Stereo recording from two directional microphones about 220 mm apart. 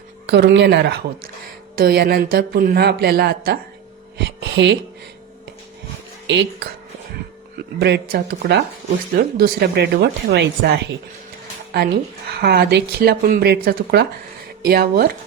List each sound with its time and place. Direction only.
0.3 s speech: 50° right (ahead or behind)
4.2 s a sound: 50° right (ahead or behind)
6.2 s speech: 55° right (ahead or behind)
12.3 s speech: 45° right (ahead or behind)